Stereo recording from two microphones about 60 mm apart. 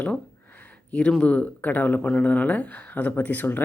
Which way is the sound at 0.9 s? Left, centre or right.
Centre.